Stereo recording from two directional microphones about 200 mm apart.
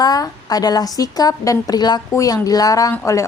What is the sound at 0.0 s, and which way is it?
A woman's voice, 20° left (ahead or behind).